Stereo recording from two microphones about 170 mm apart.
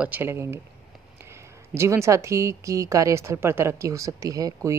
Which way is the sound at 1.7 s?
15° right (ahead or behind).